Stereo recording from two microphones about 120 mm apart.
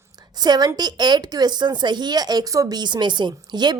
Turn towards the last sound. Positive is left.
turn(degrees=-35)  # may be behind; listen again after turning